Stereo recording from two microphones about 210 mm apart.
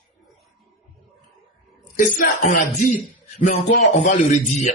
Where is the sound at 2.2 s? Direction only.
35° left (ahead or behind).